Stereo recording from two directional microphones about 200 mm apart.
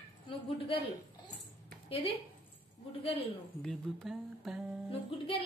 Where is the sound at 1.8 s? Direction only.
25° left (ahead or behind).